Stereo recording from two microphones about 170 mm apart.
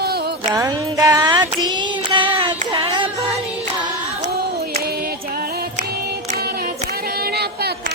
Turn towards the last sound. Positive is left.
turn(degrees=-70)  # may be behind; listen again after turning